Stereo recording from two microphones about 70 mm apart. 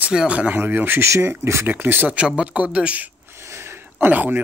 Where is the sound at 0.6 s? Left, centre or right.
Right.